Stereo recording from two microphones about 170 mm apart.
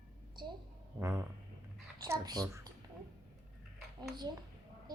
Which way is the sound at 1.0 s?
15° right (ahead or behind).